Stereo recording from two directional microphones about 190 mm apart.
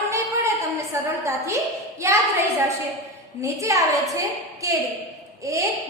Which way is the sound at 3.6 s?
15° right (ahead or behind).